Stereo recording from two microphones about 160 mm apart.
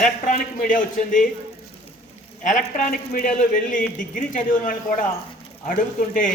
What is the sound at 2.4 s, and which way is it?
A man's voice, 50° left (ahead or behind).